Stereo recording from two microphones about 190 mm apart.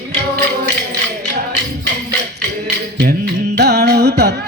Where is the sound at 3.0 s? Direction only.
60° right (ahead or behind).